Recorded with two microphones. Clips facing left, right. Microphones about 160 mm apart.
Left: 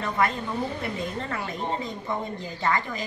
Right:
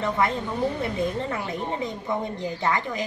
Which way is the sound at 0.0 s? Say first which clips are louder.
Right 2 dB; 20° right (ahead or behind).